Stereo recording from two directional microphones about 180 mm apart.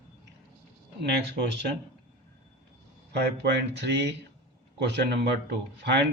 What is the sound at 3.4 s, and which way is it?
Speech, 75° right (ahead or behind).